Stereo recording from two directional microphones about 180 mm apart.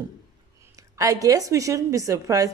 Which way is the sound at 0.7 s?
20° right (ahead or behind).